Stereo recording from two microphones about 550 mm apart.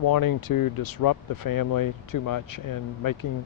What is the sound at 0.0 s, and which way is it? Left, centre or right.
Speech, left.